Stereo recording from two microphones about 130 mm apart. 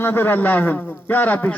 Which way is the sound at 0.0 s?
15° left (ahead or behind).